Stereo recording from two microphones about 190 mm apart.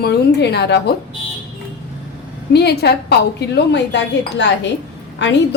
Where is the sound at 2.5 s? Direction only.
60° left (ahead or behind).